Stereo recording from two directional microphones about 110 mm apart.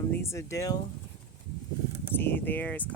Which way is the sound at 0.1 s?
25° left (ahead or behind).